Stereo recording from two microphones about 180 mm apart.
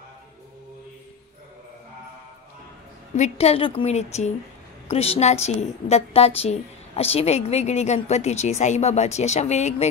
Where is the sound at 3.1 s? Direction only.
35° left (ahead or behind).